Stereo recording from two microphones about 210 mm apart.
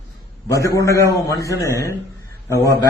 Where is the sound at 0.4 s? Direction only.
15° left (ahead or behind).